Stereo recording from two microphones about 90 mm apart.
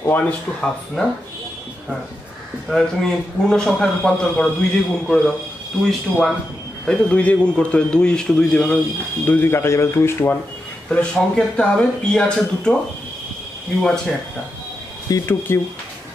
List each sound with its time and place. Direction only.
0.0 s a man's voice: 20° left (ahead or behind)
2.7 s a man's voice: 5° left (ahead or behind)
6.9 s a man's voice: 15° left (ahead or behind)
9.2 s speech: 25° left (ahead or behind)
10.9 s a man's voice: 10° left (ahead or behind)
13.7 s speech: 5° left (ahead or behind)
15.2 s speech: 30° left (ahead or behind)